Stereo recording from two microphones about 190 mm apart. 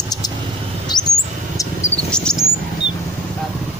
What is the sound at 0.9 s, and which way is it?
Bird, 20° left (ahead or behind).